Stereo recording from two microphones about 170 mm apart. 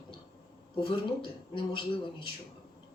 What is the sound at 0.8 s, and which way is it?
Speech, 30° left (ahead or behind).